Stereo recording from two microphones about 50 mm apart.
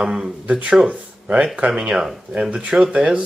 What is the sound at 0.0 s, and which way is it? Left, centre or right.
Speech, centre.